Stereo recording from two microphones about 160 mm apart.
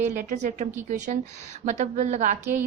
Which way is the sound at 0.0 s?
50° right (ahead or behind).